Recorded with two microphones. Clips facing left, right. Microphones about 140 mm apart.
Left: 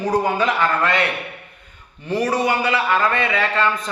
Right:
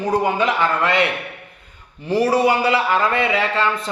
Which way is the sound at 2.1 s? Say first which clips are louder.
Right 3 dB; 30° right (ahead or behind).